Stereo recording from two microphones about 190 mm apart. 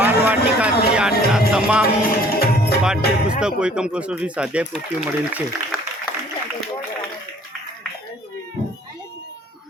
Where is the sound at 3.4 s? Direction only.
5° right (ahead or behind).